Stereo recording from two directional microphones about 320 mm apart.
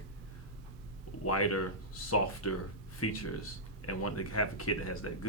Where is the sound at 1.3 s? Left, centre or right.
Left.